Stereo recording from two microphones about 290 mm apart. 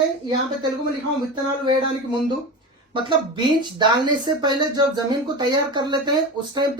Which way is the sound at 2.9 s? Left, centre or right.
Centre.